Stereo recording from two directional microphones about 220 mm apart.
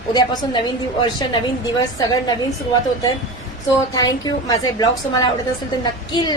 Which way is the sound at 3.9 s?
20° left (ahead or behind).